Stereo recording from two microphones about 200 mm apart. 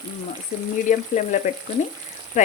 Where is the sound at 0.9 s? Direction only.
40° left (ahead or behind).